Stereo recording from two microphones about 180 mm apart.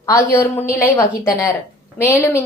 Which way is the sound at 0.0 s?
15° left (ahead or behind).